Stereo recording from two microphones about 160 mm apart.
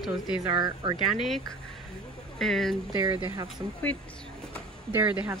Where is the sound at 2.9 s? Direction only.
20° right (ahead or behind).